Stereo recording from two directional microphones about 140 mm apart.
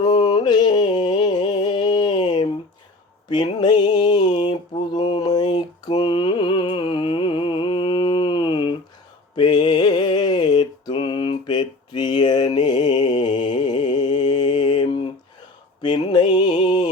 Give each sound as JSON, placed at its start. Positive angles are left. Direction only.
{"t": 0.0, "sound": "a sound", "side_deg": 30}
{"t": 3.2, "sound": "mantra", "side_deg": 30}
{"t": 9.3, "sound": "music", "side_deg": 35}
{"t": 12.5, "sound": "mantra", "side_deg": 30}
{"t": 15.8, "sound": "music", "side_deg": 35}